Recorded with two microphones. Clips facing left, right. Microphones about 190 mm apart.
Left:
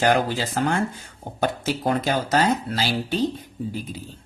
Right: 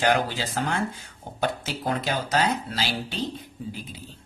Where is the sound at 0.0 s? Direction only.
45° left (ahead or behind).